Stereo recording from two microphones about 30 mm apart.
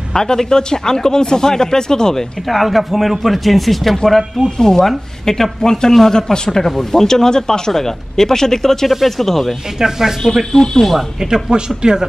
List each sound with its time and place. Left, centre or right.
0.1 s speech: centre
2.5 s speech: centre
4.6 s speech: centre
6.6 s speech: centre
8.8 s speech: centre
9.8 s speech: centre
10.5 s speech: centre
10.8 s speech: centre
11.2 s speech: centre
11.5 s speech: right